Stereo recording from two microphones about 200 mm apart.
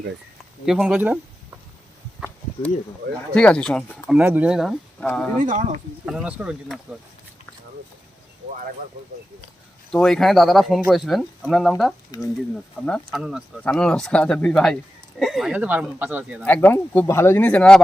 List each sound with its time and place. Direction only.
0.6 s speech: centre (ahead or behind)
3.3 s speech: 5° left (ahead or behind)
4.2 s speech: 5° right (ahead or behind)
5.4 s speech: 40° right (ahead or behind)
6.1 s speech: 5° right (ahead or behind)
9.9 s speech: 5° left (ahead or behind)
12.1 s speech: 20° left (ahead or behind)
12.8 s speech: centre (ahead or behind)
16.4 s speech: 10° left (ahead or behind)